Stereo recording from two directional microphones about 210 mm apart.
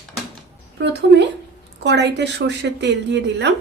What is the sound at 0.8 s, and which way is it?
A woman's voice, 55° right (ahead or behind).